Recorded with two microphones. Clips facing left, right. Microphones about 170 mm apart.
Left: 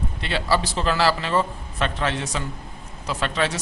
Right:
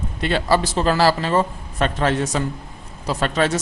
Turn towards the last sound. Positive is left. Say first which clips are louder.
# right 5 dB
turn(degrees=-45)  # may be behind; listen again after turning